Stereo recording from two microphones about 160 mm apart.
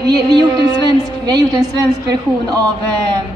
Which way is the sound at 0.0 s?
25° right (ahead or behind).